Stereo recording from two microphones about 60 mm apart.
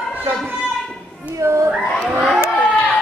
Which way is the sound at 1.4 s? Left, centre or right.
Right.